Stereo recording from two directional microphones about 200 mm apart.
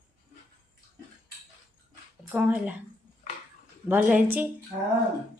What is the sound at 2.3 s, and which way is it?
Speech, 10° right (ahead or behind).